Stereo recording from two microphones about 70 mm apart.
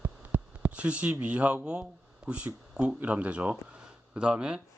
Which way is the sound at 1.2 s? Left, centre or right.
Centre.